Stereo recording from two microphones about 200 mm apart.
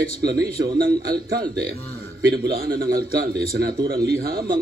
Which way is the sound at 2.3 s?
50° right (ahead or behind).